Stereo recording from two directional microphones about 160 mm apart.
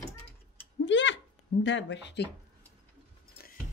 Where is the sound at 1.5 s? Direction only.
90° left.